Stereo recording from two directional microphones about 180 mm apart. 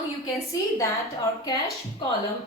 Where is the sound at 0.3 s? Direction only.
20° left (ahead or behind).